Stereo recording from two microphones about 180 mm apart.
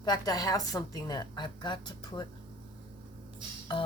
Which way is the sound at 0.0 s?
20° left (ahead or behind).